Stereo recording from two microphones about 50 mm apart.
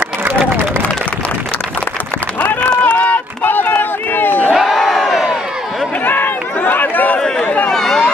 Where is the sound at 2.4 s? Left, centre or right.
Left.